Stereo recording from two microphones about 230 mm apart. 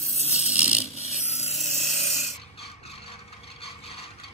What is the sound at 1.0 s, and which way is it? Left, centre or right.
Filing, left.